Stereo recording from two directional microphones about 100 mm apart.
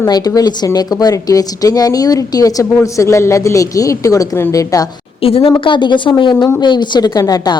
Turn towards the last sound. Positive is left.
turn(degrees=40)  # may be behind; listen again after turning